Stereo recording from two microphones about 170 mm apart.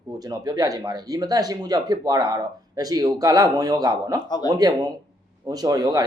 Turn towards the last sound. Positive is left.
turn(degrees=-20)  # may be behind; listen again after turning